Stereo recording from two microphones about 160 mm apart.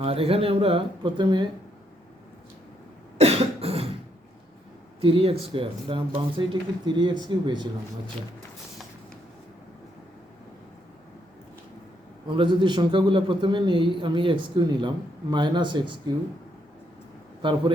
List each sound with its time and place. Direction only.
0.0 s a man's voice: 35° right (ahead or behind)
3.2 s cough: 40° right (ahead or behind)
4.9 s a man's voice: 35° right (ahead or behind)
12.4 s a man's voice: 30° right (ahead or behind)